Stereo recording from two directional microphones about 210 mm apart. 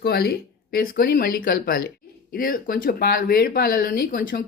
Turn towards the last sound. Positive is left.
turn(degrees=40)  # may be behind; listen again after turning